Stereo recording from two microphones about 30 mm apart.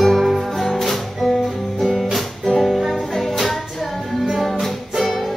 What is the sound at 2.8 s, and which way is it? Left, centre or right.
Music, centre.